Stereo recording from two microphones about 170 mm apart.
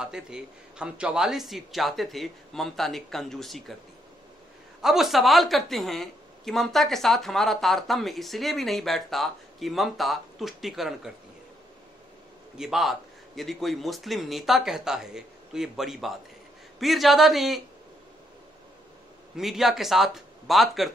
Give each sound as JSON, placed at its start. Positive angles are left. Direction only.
{"t": 0.0, "sound": "a woman's voice", "side_deg": -5}
{"t": 4.8, "sound": "a woman's voice", "side_deg": 0}
{"t": 12.5, "sound": "a woman's voice", "side_deg": 0}
{"t": 19.3, "sound": "a woman's voice", "side_deg": 0}